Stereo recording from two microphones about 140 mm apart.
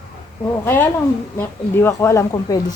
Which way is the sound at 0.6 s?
15° left (ahead or behind).